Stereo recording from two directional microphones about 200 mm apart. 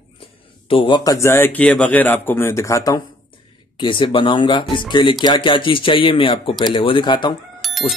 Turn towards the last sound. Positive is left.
turn(degrees=0)  # may be behind; listen again after turning